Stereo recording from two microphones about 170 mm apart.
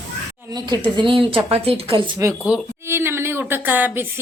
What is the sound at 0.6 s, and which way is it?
Speech, 25° right (ahead or behind).